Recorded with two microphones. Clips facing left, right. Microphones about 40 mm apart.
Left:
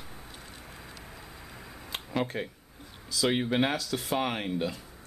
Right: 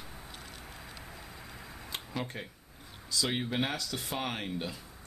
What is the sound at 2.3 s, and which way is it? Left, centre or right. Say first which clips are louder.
Speech: left 7 dB; left.